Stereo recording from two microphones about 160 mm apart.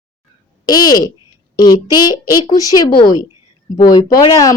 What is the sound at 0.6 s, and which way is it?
A woman's voice, 25° left (ahead or behind).